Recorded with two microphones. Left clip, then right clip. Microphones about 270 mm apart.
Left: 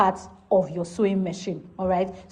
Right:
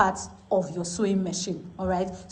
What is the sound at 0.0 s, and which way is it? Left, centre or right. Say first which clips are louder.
A woman's voice: left 2 dB; left.